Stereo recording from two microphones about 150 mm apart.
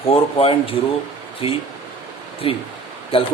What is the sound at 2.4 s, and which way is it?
Speech, 40° left (ahead or behind).